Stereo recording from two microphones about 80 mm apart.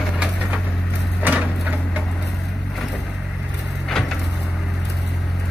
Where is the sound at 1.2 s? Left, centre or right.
Centre.